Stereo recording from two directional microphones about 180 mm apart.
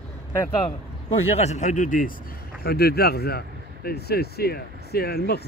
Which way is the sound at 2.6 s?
60° left (ahead or behind).